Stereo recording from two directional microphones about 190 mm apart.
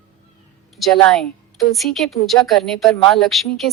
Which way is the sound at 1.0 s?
Centre (ahead or behind).